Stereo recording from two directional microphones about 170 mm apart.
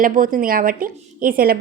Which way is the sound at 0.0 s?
50° right (ahead or behind).